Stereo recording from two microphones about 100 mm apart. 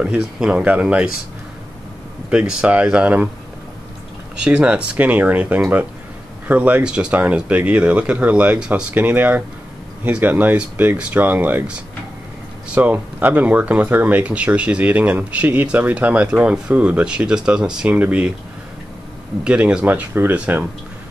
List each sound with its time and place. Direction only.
0.0 s speech: 10° right (ahead or behind)
2.2 s speech: 10° right (ahead or behind)
4.4 s speech: 10° right (ahead or behind)
12.7 s speech: 20° right (ahead or behind)
19.4 s speech: 10° right (ahead or behind)